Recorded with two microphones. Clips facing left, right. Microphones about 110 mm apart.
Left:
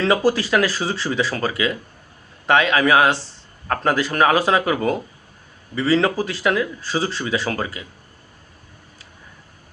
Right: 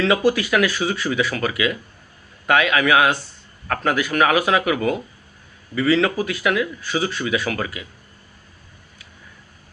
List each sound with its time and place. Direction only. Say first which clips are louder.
0.0 s a man's voice: even; 35° left (ahead or behind)